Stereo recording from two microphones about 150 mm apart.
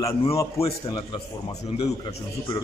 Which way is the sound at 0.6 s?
35° left (ahead or behind).